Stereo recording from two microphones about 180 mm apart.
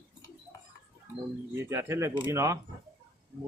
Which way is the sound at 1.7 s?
15° right (ahead or behind).